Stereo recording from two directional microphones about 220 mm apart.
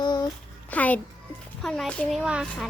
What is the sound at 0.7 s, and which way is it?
A child's voice, 5° left (ahead or behind).